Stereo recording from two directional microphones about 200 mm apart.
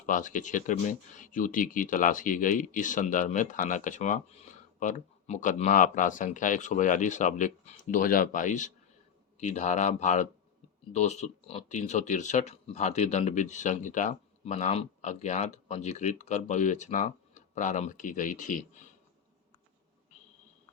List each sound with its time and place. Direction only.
0.0 s speech: 40° left (ahead or behind)